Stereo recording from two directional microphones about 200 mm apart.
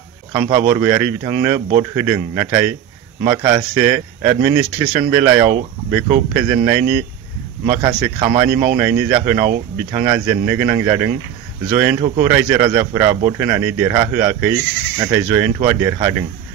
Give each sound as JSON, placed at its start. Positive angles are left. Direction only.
{"t": 0.3, "sound": "speech", "side_deg": -10}